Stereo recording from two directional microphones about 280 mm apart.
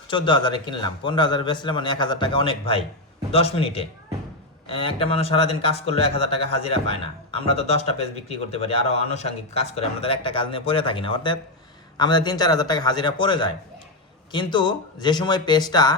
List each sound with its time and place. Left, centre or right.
0.1 s a man's voice: centre